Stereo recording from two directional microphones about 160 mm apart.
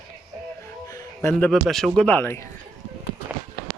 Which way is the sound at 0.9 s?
25° left (ahead or behind).